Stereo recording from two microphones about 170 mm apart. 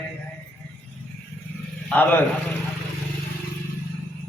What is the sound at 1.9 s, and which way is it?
Speech, 10° left (ahead or behind).